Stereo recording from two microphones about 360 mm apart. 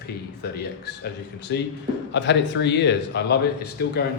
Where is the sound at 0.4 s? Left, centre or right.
Left.